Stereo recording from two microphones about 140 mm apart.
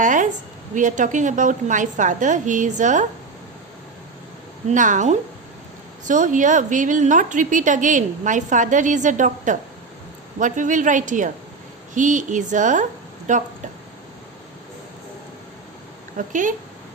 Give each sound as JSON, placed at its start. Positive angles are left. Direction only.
{"t": 0.0, "sound": "a sound", "side_deg": -65}
{"t": 0.7, "sound": "a woman's voice", "side_deg": -65}
{"t": 4.7, "sound": "a woman's voice", "side_deg": -65}
{"t": 16.1, "sound": "speech", "side_deg": -65}